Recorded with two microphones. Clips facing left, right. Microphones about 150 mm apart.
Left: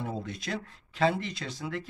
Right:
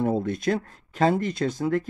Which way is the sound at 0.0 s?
50° right (ahead or behind).